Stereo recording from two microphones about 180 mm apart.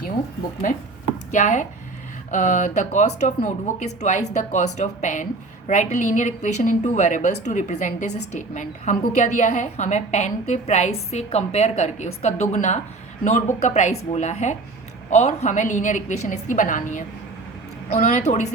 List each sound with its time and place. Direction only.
1.3 s a woman's voice: 45° left (ahead or behind)